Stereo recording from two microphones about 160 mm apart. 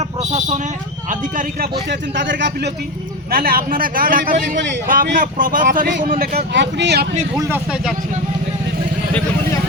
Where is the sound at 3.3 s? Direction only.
70° right (ahead or behind); by 7.1 s 90° right.